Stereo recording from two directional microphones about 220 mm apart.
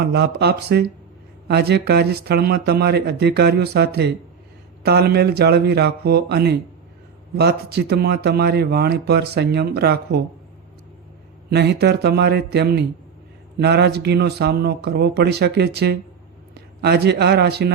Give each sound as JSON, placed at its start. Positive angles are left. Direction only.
{"t": 0.0, "sound": "speech", "side_deg": -50}
{"t": 11.5, "sound": "a man's voice", "side_deg": -50}